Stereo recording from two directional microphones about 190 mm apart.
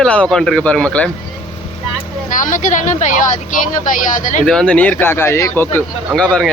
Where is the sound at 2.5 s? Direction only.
40° left (ahead or behind).